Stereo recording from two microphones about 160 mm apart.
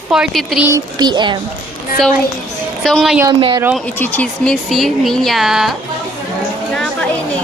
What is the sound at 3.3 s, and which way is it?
Speech, 30° right (ahead or behind).